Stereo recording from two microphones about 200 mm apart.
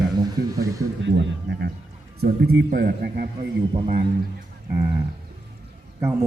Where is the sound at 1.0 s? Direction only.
60° right (ahead or behind).